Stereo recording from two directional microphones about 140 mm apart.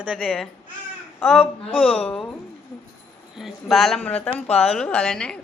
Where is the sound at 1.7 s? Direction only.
45° left (ahead or behind).